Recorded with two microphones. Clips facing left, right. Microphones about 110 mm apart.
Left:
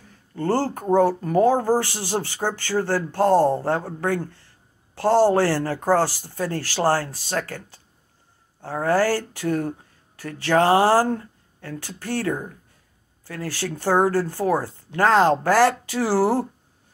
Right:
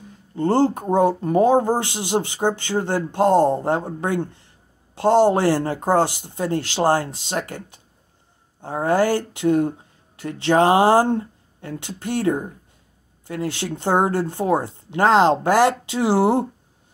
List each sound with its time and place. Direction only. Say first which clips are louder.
0.0 s speech: right 4 dB; 20° right (ahead or behind)